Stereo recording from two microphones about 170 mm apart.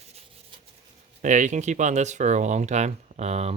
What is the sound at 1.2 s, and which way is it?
Speech, 45° right (ahead or behind).